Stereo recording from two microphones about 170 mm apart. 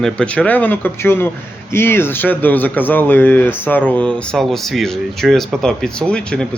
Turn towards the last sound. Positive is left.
turn(degrees=5)  # may be behind; listen again after turning